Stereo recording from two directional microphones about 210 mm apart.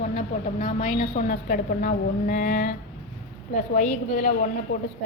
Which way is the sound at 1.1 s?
40° left (ahead or behind).